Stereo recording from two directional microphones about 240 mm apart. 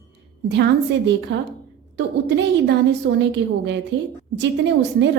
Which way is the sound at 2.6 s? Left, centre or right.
Right.